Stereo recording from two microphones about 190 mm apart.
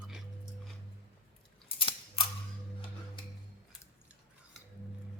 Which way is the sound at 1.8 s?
25° left (ahead or behind).